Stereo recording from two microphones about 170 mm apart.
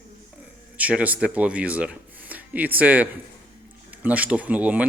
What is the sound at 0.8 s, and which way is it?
Speech, 10° right (ahead or behind).